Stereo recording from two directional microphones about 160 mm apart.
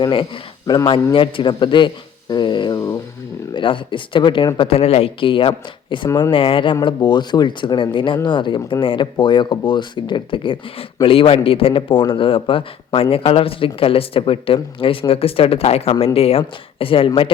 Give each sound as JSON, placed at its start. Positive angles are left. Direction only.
{"t": 0.0, "sound": "a man's voice", "side_deg": 30}
{"t": 6.1, "sound": "speech", "side_deg": 20}
{"t": 6.3, "sound": "a man's voice", "side_deg": 35}